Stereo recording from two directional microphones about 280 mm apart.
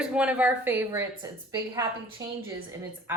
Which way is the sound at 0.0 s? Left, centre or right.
Centre.